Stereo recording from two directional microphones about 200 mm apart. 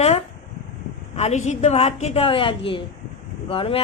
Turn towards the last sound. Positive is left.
turn(degrees=25)  # may be behind; listen again after turning